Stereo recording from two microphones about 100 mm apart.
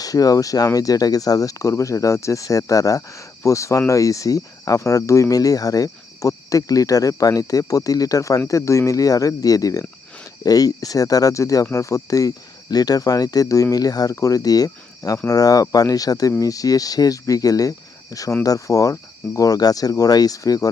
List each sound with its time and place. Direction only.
0.0 s speech: 35° left (ahead or behind)